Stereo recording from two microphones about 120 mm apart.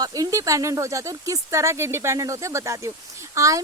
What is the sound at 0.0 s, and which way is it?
Speech, 30° right (ahead or behind).